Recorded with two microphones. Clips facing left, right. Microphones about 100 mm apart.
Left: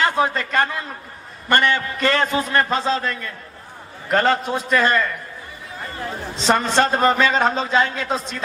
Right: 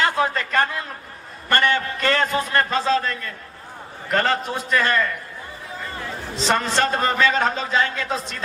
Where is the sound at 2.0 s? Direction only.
25° left (ahead or behind).